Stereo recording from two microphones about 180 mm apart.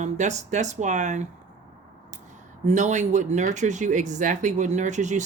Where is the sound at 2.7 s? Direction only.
40° right (ahead or behind).